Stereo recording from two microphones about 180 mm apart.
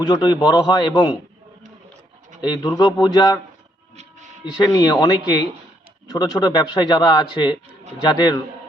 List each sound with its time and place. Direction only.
0.0 s a man's voice: 25° left (ahead or behind)
2.4 s a man's voice: 25° left (ahead or behind)
4.5 s a man's voice: 20° left (ahead or behind)